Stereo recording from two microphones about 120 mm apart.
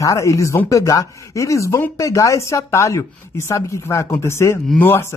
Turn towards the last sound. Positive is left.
turn(degrees=20)  # may be behind; listen again after turning